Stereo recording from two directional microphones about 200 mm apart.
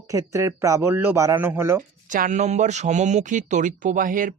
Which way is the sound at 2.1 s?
40° right (ahead or behind).